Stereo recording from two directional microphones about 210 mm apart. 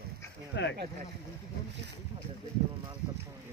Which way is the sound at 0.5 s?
55° left (ahead or behind).